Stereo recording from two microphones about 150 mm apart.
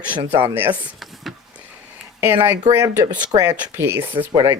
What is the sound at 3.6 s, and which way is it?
Speech, 15° right (ahead or behind).